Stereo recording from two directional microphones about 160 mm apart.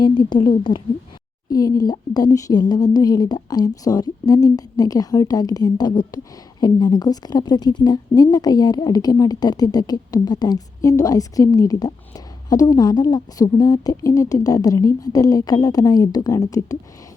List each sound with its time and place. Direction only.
0.0 s a woman's voice: 30° left (ahead or behind)